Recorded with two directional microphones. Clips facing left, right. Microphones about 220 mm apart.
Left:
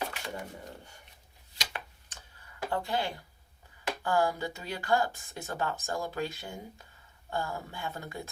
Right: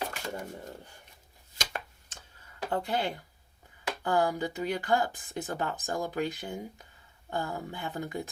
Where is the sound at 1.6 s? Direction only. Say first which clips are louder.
Right 3 dB; 45° right (ahead or behind).